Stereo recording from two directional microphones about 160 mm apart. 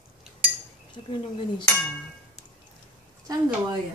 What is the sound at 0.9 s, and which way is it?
Speech, 30° left (ahead or behind).